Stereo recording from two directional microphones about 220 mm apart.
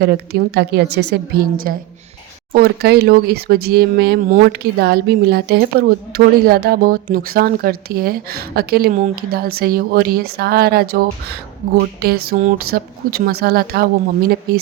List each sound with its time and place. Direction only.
0.0 s speech: 45° right (ahead or behind)